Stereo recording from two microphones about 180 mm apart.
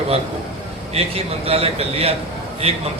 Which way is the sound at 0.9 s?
35° right (ahead or behind).